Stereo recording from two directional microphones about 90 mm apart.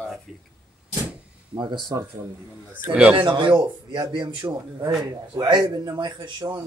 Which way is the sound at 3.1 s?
65° right (ahead or behind).